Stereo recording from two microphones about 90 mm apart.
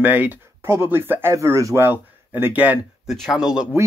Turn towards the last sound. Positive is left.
turn(degrees=-5)  # may be behind; listen again after turning